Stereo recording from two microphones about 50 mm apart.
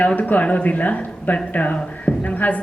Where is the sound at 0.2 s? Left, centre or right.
Left.